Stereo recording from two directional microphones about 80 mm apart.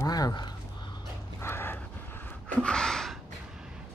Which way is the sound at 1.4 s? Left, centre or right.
Left.